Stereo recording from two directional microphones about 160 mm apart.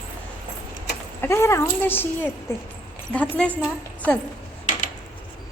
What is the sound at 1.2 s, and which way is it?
A woman's voice, 15° left (ahead or behind).